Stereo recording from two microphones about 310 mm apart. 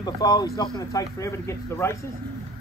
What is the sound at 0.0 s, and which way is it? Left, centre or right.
Speech, centre.